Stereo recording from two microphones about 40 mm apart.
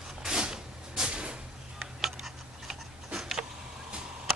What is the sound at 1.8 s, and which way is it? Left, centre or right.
Tick-tock, centre.